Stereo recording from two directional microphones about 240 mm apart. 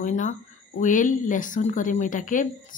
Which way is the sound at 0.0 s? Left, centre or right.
Left.